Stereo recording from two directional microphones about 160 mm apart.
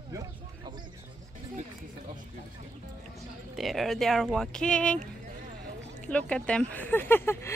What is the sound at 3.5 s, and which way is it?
Speech, centre (ahead or behind).